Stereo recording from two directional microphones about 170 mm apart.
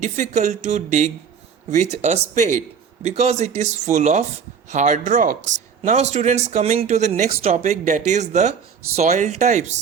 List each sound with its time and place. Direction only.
0.0 s speech: 45° right (ahead or behind)